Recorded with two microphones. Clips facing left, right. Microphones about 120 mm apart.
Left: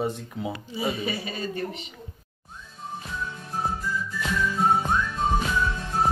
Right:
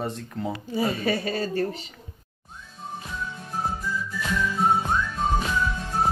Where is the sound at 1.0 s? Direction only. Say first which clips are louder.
Right 5 dB; 45° right (ahead or behind).